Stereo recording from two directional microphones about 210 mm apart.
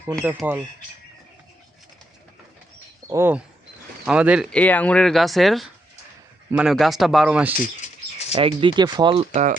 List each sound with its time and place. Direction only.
0.3 s speech: 10° right (ahead or behind)
3.1 s speech: 10° right (ahead or behind)
4.5 s speech: 5° left (ahead or behind)
8.3 s speech: 25° right (ahead or behind)